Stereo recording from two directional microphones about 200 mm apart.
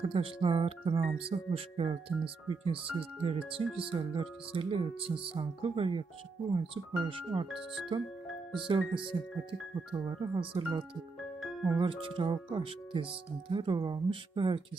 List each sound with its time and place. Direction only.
0.0 s speech: 25° right (ahead or behind)
7.5 s speech: centre (ahead or behind)
8.6 s speech: 25° right (ahead or behind)
10.0 s speech: 20° right (ahead or behind)
11.4 s music: 10° right (ahead or behind)
11.8 s speech: 25° right (ahead or behind)